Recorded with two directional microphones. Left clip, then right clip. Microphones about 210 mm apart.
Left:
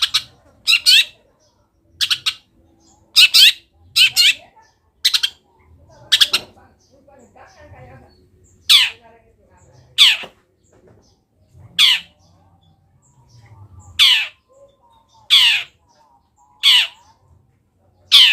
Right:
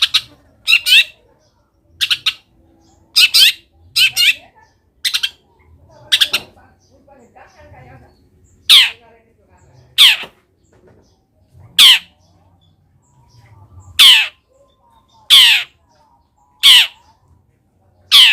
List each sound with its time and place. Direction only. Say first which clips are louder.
0.1 s bird: right 4 dB; 10° right (ahead or behind)
3.9 s squawk: right 1 dB; 10° right (ahead or behind)
5.0 s bird: left 1 dB; 10° right (ahead or behind)
8.6 s squawk: right 4 dB; 15° right (ahead or behind)
9.9 s a sound: right 3 dB; 20° right (ahead or behind)
11.8 s squawk: right 6 dB; 25° right (ahead or behind)
13.9 s bird: right 6 dB; 25° right (ahead or behind)
18.1 s squawk: right 2 dB; 25° right (ahead or behind)